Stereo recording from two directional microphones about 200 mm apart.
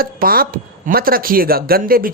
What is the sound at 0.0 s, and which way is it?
Speech, 45° right (ahead or behind).